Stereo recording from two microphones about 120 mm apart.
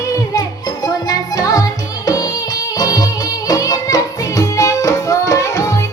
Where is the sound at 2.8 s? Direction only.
30° left (ahead or behind).